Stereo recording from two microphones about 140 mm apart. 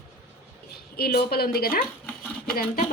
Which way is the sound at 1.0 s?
90° left.